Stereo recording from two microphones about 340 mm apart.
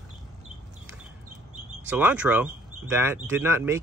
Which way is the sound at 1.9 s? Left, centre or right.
Centre.